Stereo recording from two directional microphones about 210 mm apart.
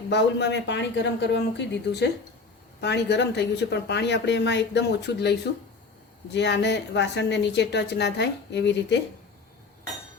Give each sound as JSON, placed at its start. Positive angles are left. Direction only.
{"t": 0.1, "sound": "a woman's voice", "side_deg": 55}